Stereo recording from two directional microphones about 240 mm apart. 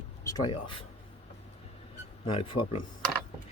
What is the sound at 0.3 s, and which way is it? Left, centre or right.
Speech, left.